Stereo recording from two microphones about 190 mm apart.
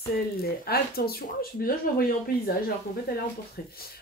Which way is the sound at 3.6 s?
55° left (ahead or behind).